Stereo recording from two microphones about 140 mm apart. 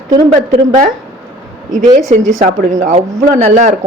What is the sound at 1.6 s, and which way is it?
Speech, 65° right (ahead or behind).